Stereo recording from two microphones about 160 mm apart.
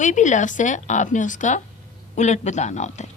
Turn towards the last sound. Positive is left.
turn(degrees=45)  # may be behind; listen again after turning